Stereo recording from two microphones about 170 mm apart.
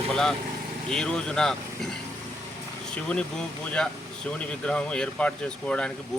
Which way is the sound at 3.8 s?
5° left (ahead or behind).